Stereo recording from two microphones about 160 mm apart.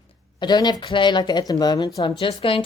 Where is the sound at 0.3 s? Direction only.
25° left (ahead or behind).